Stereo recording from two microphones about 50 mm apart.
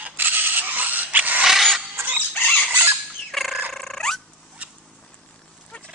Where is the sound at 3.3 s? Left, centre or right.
Centre.